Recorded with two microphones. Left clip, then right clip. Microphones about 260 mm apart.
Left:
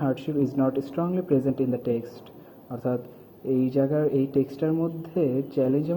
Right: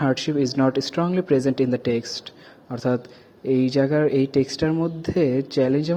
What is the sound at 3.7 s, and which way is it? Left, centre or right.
Speech, right.